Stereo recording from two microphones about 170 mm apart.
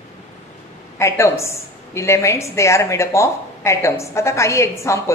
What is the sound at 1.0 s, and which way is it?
A woman's voice, 15° left (ahead or behind).